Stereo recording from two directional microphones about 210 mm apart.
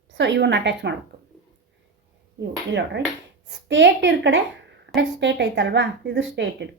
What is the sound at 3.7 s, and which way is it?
Speech, 60° right (ahead or behind).